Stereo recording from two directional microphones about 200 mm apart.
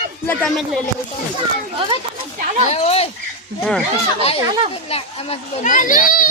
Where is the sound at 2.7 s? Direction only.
30° left (ahead or behind).